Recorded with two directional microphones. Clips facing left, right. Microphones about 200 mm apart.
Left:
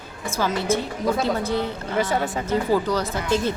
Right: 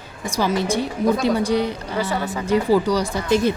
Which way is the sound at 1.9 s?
20° left (ahead or behind).